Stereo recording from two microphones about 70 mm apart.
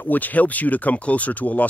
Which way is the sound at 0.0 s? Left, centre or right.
Left.